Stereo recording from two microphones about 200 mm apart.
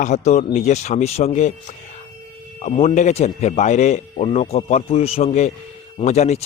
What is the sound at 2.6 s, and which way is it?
Speech, 35° left (ahead or behind).